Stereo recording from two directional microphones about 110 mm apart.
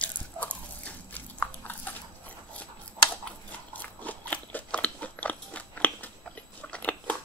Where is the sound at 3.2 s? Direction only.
15° left (ahead or behind).